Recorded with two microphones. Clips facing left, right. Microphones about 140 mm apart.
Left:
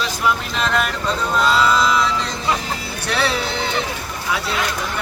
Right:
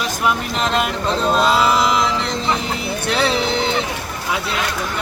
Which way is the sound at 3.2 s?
20° right (ahead or behind).